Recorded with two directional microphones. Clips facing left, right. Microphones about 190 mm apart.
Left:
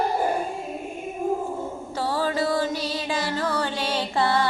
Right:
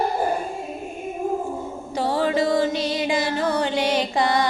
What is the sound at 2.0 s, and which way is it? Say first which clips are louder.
Music: right 4 dB; 20° right (ahead or behind).